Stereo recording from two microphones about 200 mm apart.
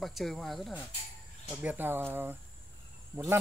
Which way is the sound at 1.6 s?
10° right (ahead or behind).